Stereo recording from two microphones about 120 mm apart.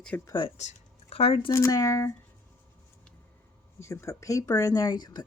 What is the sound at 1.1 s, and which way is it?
Speech, 55° left (ahead or behind).